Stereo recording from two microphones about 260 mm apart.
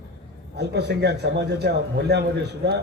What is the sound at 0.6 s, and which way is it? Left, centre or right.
A man's voice, right.